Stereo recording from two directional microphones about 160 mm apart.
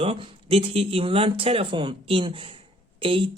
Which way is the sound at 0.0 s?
35° right (ahead or behind).